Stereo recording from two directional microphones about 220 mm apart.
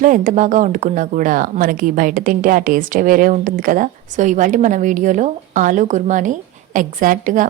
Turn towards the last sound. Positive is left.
turn(degrees=-35)  # may be behind; listen again after turning